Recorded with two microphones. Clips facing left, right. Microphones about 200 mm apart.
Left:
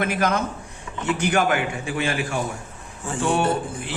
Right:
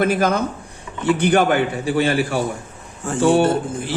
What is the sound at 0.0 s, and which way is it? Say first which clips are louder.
Speech: right 5 dB; 35° right (ahead or behind).